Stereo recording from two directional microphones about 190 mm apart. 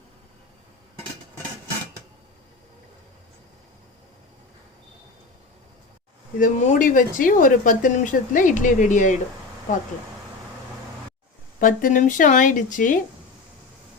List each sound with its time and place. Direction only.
6.4 s speech: 45° left (ahead or behind)
11.6 s speech: 45° left (ahead or behind)